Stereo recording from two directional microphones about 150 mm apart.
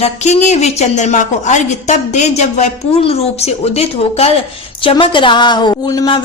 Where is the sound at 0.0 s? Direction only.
50° left (ahead or behind).